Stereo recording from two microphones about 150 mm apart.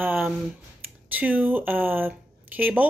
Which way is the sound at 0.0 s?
10° right (ahead or behind).